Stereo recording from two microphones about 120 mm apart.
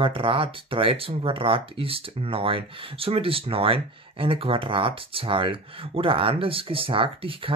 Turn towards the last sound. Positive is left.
turn(degrees=-50)  # may be behind; listen again after turning